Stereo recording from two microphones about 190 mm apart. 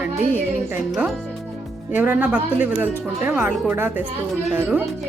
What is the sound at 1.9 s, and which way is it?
Speech, 10° right (ahead or behind).